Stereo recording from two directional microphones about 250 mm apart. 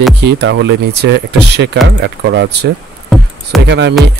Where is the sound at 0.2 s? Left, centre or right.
Right.